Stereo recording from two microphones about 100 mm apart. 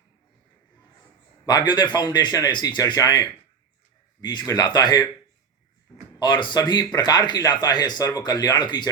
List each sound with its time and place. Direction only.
1.5 s speech: 45° left (ahead or behind)
6.1 s speech: 50° left (ahead or behind)